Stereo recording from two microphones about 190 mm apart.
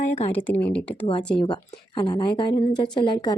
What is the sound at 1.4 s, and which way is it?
Speech, 25° left (ahead or behind).